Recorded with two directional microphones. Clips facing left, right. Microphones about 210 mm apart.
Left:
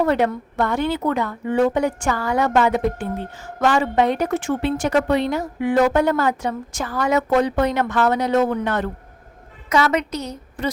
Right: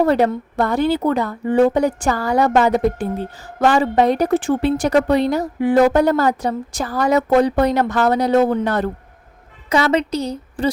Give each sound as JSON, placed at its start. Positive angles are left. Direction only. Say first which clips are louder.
{"t": 0.0, "sound": "a woman's voice", "louder": "right 3 dB", "side_deg": -35}